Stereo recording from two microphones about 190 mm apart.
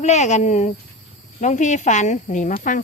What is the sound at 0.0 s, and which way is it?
Speech, 35° left (ahead or behind).